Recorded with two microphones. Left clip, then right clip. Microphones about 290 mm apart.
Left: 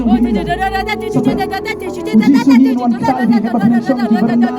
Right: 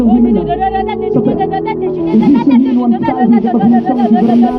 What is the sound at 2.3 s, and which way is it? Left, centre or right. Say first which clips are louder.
Speech: even; left.